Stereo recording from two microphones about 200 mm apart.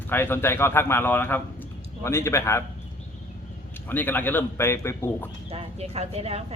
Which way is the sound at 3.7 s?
10° left (ahead or behind).